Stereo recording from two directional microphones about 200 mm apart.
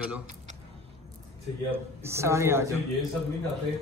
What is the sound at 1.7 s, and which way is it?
Speech, 10° right (ahead or behind).